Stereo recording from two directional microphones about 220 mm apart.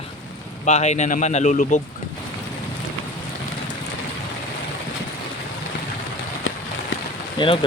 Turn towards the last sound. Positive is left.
turn(degrees=25)  # may be behind; listen again after turning